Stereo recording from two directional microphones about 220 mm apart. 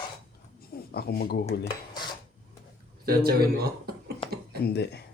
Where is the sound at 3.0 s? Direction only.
45° right (ahead or behind).